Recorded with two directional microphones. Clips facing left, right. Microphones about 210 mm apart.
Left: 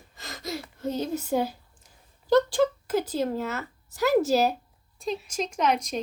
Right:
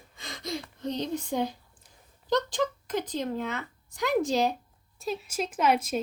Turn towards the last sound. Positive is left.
turn(degrees=-5)  # may be behind; listen again after turning